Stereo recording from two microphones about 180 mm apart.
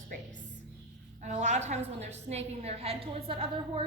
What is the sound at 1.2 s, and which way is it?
A woman's voice, 40° right (ahead or behind).